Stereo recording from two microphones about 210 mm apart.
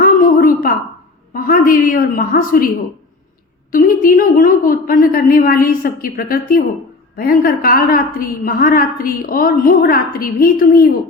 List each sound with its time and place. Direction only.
0.0 s a sound: 40° left (ahead or behind)
1.3 s a woman's voice: 45° left (ahead or behind)
3.7 s a woman's voice: 40° left (ahead or behind)